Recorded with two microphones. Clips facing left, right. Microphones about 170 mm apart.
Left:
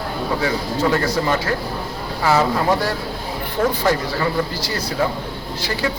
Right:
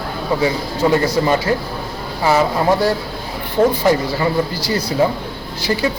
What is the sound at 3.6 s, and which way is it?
Speech, 15° right (ahead or behind).